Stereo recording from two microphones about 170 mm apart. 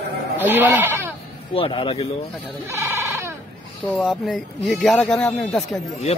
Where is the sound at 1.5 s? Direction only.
30° left (ahead or behind).